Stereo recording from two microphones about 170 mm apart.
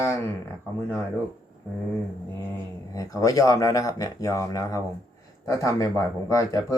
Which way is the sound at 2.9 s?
20° left (ahead or behind).